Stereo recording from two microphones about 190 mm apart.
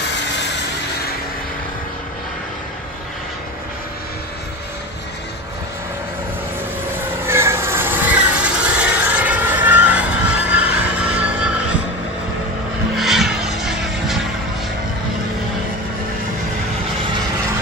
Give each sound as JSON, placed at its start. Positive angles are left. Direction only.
{"t": 7.2, "sound": "vehicle", "side_deg": -15}
{"t": 12.9, "sound": "vehicle", "side_deg": 0}